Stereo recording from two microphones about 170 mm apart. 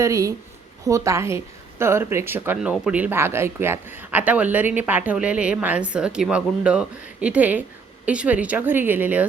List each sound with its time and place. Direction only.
0.0 s speech: 20° right (ahead or behind)